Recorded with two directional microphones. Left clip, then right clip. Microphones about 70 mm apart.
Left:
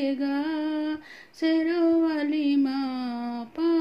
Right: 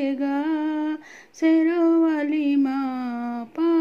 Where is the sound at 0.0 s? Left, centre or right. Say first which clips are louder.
Right 3 dB; right.